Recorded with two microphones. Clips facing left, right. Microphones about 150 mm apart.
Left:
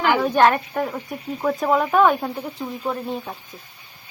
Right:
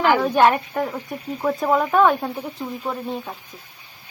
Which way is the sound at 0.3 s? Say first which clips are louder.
Even; 10° right (ahead or behind).